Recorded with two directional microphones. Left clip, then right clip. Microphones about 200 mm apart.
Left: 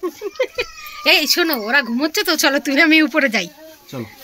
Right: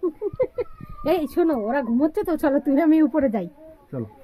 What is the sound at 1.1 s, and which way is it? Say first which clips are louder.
Speech: left 6 dB; 20° left (ahead or behind).